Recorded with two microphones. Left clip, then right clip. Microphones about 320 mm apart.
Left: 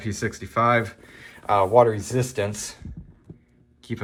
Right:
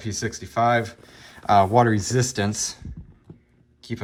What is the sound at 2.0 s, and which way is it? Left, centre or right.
Speech, right.